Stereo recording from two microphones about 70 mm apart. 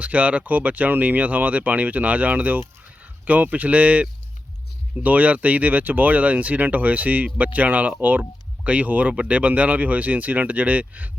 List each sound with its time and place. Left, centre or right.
0.0 s speech: centre